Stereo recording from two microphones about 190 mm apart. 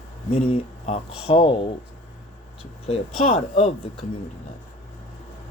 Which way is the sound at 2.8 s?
30° left (ahead or behind).